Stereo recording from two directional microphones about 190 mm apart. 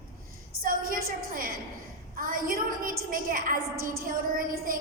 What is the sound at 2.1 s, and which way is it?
A woman's voice, 45° right (ahead or behind).